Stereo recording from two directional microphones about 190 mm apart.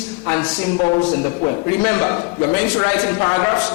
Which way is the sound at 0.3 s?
20° left (ahead or behind).